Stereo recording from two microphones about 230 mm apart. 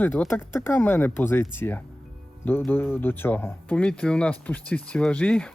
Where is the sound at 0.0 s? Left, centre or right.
Centre.